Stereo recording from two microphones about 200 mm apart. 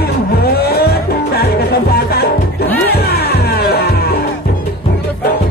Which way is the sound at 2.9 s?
50° left (ahead or behind).